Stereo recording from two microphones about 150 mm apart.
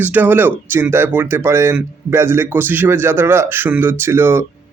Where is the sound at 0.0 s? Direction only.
10° right (ahead or behind).